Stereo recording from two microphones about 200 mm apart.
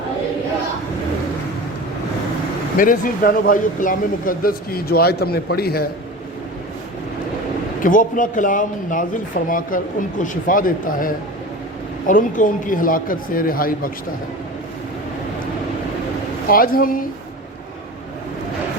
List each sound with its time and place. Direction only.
2.7 s a man's voice: 45° left (ahead or behind)
7.8 s a man's voice: 40° left (ahead or behind)
16.5 s a man's voice: 45° left (ahead or behind)